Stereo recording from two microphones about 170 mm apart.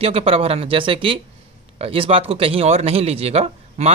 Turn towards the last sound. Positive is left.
turn(degrees=-35)  # may be behind; listen again after turning